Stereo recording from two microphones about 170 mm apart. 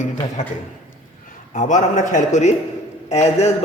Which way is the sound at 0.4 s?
45° left (ahead or behind).